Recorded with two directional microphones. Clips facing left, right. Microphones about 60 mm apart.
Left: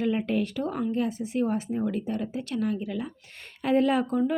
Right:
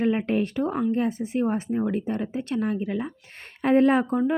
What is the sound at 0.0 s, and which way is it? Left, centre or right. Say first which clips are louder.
Speech: right 3 dB; right.